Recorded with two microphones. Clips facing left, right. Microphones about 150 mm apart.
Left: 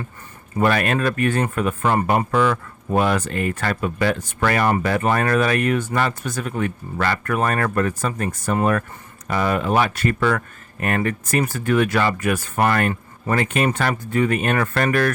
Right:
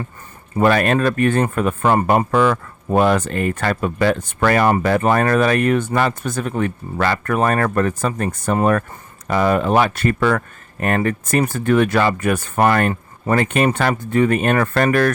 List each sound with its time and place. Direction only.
0.5 s speech: 40° right (ahead or behind)
6.2 s speech: 50° right (ahead or behind)
6.5 s speech: 40° right (ahead or behind)
11.4 s speech: 50° right (ahead or behind)